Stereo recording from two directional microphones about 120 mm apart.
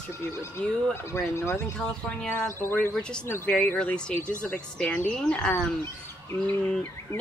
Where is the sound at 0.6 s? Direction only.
10° left (ahead or behind).